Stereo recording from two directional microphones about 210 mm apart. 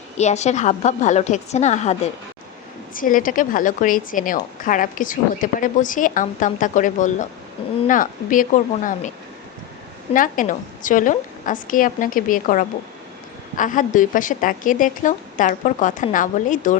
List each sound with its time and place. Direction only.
0.2 s a woman's voice: 35° left (ahead or behind)
10.2 s a woman's voice: 40° left (ahead or behind)